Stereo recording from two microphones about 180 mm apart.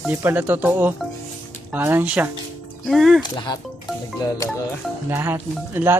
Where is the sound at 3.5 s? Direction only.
25° left (ahead or behind).